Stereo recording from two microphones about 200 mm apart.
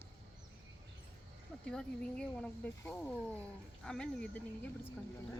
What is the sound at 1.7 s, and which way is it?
Speech, 5° left (ahead or behind).